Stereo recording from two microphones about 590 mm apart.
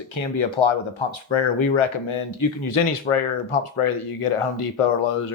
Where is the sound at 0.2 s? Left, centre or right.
Left.